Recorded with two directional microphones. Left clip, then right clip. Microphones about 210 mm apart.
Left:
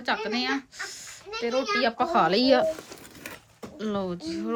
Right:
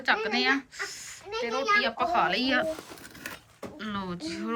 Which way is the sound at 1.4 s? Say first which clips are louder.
Even; 25° left (ahead or behind).